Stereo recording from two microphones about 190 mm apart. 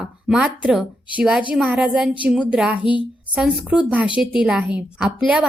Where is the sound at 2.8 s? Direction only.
25° left (ahead or behind).